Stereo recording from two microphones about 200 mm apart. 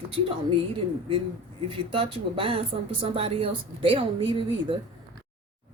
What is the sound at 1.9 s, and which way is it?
A woman's voice, 25° right (ahead or behind).